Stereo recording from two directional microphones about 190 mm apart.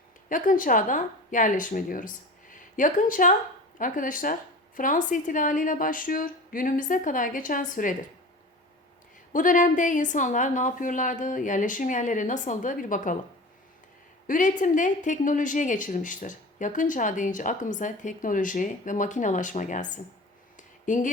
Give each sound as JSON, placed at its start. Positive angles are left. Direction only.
{"t": 0.3, "sound": "a woman's voice", "side_deg": 45}
{"t": 9.3, "sound": "a woman's voice", "side_deg": 45}
{"t": 14.3, "sound": "a woman's voice", "side_deg": 45}
{"t": 20.6, "sound": "a sound", "side_deg": 40}